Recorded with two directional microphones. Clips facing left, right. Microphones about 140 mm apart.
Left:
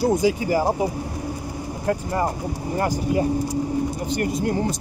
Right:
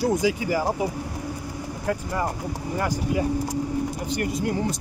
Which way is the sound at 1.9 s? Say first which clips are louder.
Left 4 dB; 40° left (ahead or behind).